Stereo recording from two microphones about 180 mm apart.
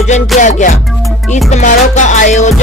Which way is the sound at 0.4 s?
45° left (ahead or behind).